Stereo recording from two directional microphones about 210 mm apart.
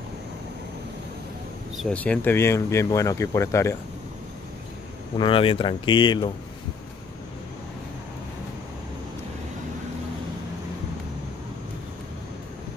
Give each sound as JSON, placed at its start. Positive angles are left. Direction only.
{"t": 1.8, "sound": "speech", "side_deg": 5}
{"t": 5.1, "sound": "speech", "side_deg": 25}